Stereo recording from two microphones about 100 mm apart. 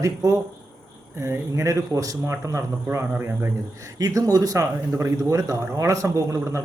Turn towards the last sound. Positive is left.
turn(degrees=-30)  # may be behind; listen again after turning